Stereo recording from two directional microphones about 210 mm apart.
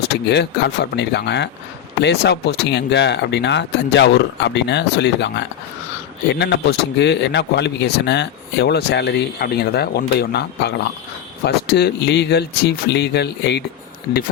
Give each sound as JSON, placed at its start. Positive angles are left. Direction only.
{"t": 0.3, "sound": "a man's voice", "side_deg": 55}